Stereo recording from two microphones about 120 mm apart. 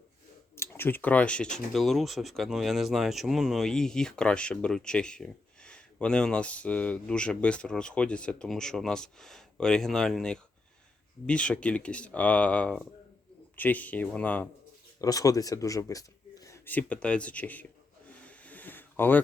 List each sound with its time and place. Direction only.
0.5 s speech: 20° left (ahead or behind)
15.0 s speech: 30° left (ahead or behind)
16.6 s speech: 10° left (ahead or behind)
18.3 s a sound: 15° left (ahead or behind)